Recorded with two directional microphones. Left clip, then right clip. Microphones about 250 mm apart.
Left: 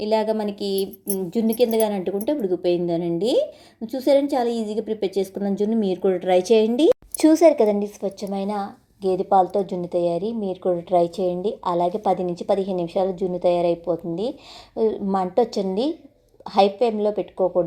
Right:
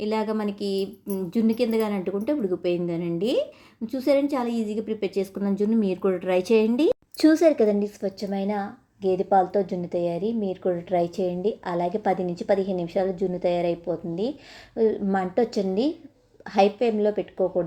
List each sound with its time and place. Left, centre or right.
0.0 s a woman's voice: centre
7.2 s a woman's voice: centre